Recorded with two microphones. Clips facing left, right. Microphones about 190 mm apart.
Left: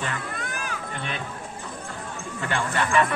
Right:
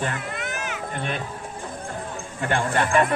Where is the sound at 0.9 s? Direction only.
50° right (ahead or behind).